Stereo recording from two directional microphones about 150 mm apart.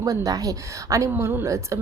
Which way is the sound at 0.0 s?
25° right (ahead or behind).